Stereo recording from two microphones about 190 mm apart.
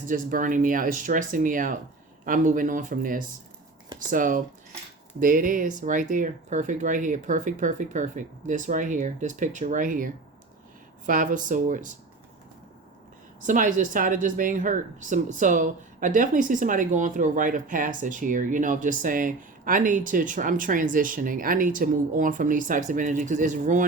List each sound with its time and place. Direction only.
0.0 s speech: 45° right (ahead or behind)
13.4 s speech: 45° right (ahead or behind)